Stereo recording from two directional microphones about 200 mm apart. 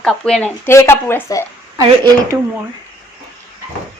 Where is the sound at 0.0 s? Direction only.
Centre (ahead or behind).